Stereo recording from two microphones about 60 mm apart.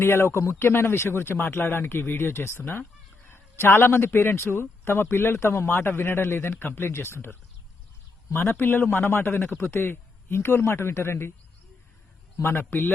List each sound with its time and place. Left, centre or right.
0.0 s a man's voice: left
12.4 s a man's voice: left